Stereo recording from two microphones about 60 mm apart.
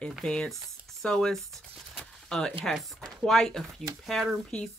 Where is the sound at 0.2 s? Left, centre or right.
Centre.